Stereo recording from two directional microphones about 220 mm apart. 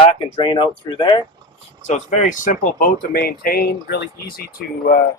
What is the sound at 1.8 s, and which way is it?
Speech, 35° left (ahead or behind).